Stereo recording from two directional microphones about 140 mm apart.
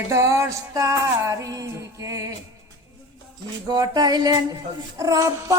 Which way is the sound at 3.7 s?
30° right (ahead or behind).